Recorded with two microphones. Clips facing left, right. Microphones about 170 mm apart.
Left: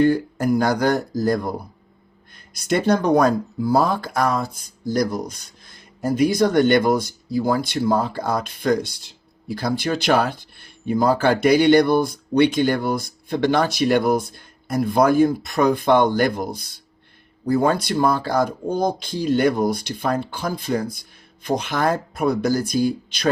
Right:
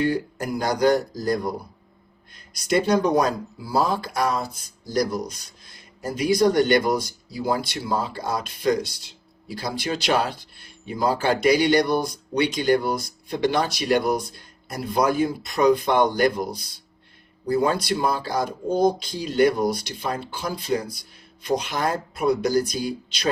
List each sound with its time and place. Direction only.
0.0 s speech: 50° left (ahead or behind)